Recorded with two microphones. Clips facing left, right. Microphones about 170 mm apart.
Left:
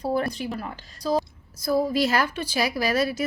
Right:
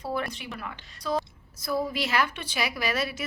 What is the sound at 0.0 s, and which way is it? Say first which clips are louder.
A woman's voice: left 6 dB; 40° left (ahead or behind).